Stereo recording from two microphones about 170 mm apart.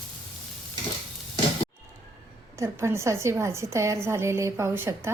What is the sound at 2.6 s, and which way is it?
A woman's voice, 15° right (ahead or behind).